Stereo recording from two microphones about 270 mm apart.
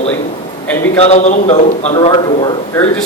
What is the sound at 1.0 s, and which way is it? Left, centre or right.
A man's voice, left.